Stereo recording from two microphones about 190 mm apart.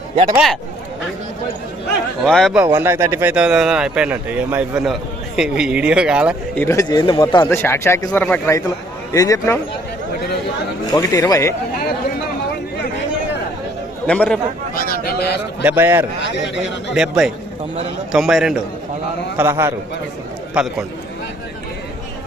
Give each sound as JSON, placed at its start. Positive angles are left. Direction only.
{"t": 0.3, "sound": "speech", "side_deg": 0}
{"t": 2.2, "sound": "speech", "side_deg": 0}
{"t": 2.6, "sound": "speech", "side_deg": -10}
{"t": 6.6, "sound": "a man's voice", "side_deg": 15}
{"t": 7.5, "sound": "speech", "side_deg": 15}
{"t": 10.8, "sound": "speech", "side_deg": 20}
{"t": 14.1, "sound": "speech", "side_deg": 5}
{"t": 14.8, "sound": "a sound", "side_deg": 50}
{"t": 15.6, "sound": "speech", "side_deg": -10}
{"t": 16.2, "sound": "speech", "side_deg": 70}
{"t": 16.9, "sound": "speech", "side_deg": -5}
{"t": 19.4, "sound": "speech", "side_deg": -15}